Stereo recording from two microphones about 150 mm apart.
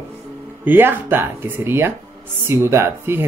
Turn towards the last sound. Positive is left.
turn(degrees=-15)  # may be behind; listen again after turning